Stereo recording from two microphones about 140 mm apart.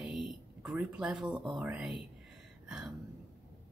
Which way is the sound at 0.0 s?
5° right (ahead or behind).